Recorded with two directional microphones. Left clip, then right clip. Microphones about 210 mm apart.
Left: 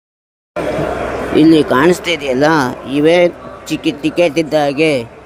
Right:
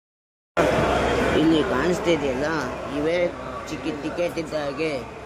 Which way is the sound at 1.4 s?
35° left (ahead or behind).